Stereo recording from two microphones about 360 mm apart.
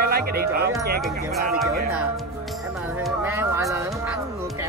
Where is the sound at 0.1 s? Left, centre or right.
Right.